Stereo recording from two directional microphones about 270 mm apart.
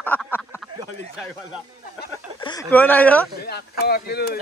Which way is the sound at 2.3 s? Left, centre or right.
Centre.